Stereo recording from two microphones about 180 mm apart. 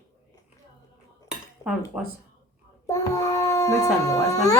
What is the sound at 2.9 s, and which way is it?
A child's voice, 20° left (ahead or behind).